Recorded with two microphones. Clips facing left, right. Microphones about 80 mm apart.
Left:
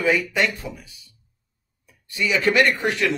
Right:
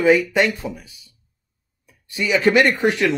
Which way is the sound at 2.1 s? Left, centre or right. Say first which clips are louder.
Right 4 dB; centre.